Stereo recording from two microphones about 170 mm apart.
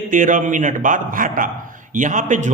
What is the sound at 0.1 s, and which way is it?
A man's voice, 50° right (ahead or behind).